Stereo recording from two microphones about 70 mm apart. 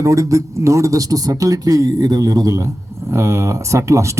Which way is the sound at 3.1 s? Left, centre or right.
Right.